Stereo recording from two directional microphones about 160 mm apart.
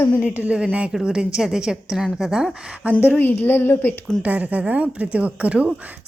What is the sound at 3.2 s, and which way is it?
A woman's voice, 10° left (ahead or behind).